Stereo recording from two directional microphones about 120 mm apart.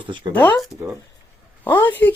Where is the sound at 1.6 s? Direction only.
20° left (ahead or behind).